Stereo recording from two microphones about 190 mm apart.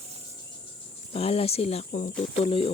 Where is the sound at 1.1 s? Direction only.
30° left (ahead or behind).